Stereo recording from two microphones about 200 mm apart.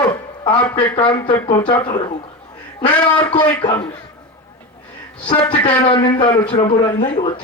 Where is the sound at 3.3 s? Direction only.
25° left (ahead or behind).